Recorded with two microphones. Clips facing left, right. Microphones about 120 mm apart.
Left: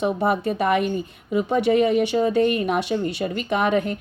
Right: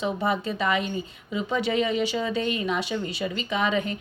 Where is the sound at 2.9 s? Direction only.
50° left (ahead or behind).